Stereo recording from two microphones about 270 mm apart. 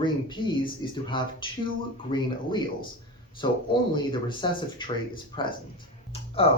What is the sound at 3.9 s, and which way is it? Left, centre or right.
Speech, centre.